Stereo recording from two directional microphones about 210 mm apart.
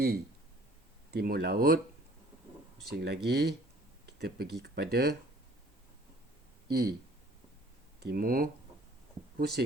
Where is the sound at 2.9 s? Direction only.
50° right (ahead or behind).